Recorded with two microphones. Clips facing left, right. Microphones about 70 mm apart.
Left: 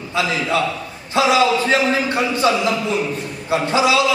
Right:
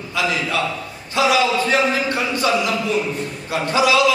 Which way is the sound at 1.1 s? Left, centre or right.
Left.